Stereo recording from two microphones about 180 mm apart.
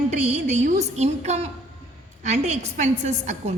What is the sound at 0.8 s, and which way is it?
A woman's voice, 40° right (ahead or behind).